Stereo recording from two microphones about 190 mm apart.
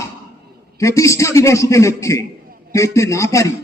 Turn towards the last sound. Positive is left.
turn(degrees=15)  # may be behind; listen again after turning